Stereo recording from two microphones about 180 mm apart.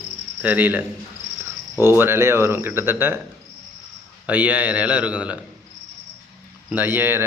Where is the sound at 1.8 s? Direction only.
15° right (ahead or behind).